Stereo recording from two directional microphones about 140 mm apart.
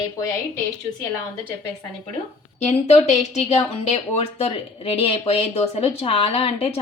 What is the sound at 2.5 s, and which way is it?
A woman's voice, 50° left (ahead or behind).